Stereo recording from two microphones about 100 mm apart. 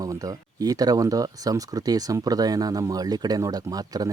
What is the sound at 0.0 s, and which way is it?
Speech, 35° right (ahead or behind).